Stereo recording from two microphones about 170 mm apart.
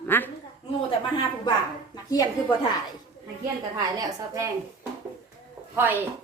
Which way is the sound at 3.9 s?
20° right (ahead or behind).